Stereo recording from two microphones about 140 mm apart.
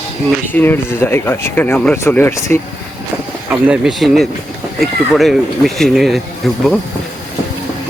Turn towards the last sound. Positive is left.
turn(degrees=0)  # may be behind; listen again after turning